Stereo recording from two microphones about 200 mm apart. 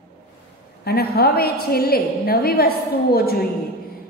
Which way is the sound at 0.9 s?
50° left (ahead or behind).